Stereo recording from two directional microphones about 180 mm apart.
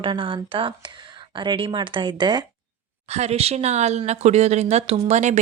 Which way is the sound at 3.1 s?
35° right (ahead or behind).